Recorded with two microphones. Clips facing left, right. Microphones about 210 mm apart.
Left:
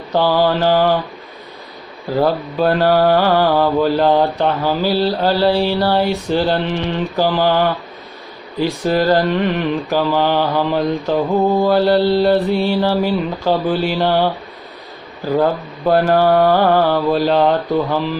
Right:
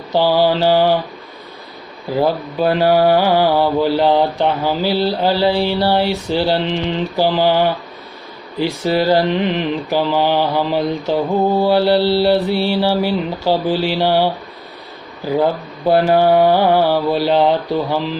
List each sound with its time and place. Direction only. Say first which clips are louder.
0.1 s speech: right 1 dB; 15° right (ahead or behind)
2.0 s speech: left 1 dB; 15° right (ahead or behind)